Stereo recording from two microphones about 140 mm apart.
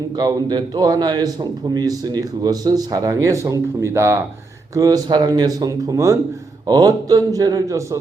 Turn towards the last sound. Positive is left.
turn(degrees=-20)  # may be behind; listen again after turning